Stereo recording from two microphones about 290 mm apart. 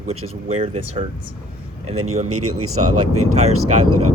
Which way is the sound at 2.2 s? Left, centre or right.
Right.